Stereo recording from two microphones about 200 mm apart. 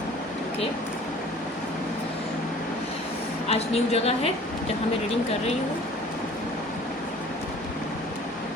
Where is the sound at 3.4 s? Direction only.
30° left (ahead or behind).